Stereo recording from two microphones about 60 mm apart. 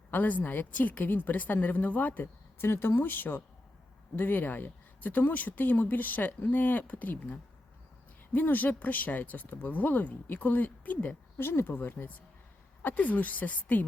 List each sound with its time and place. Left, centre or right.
0.1 s a woman's voice: left
11.3 s a woman's voice: left